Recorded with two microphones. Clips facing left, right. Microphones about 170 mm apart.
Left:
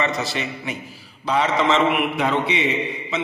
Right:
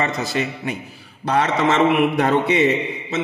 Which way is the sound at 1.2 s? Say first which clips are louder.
Right 1 dB; 65° right (ahead or behind).